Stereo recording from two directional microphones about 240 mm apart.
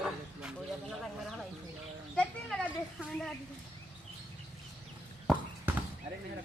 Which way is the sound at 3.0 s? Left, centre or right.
Centre.